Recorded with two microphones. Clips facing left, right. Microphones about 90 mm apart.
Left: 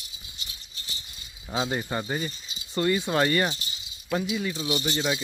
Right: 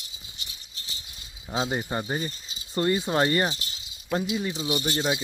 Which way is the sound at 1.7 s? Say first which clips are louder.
Even; 15° right (ahead or behind).